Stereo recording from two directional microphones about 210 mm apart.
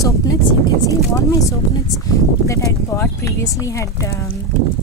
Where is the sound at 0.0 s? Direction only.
15° left (ahead or behind).